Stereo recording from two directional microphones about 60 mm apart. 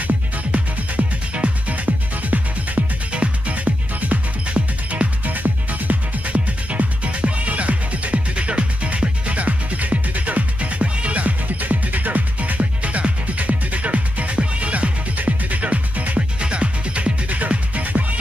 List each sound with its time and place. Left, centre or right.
0.0 s music: right